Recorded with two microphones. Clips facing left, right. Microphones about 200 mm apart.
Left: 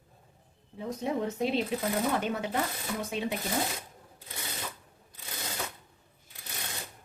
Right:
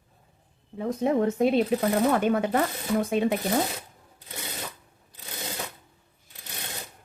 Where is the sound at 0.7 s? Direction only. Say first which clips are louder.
Right 7 dB; 55° right (ahead or behind).